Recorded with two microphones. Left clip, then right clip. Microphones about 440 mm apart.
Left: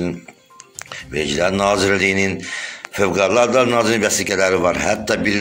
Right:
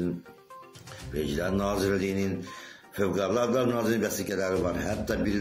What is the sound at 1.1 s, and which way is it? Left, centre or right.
A man's voice, right.